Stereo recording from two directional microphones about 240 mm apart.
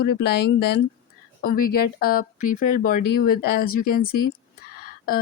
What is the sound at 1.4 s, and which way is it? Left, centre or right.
Speech, left.